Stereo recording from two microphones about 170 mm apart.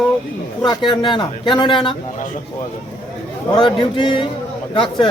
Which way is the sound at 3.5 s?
30° left (ahead or behind).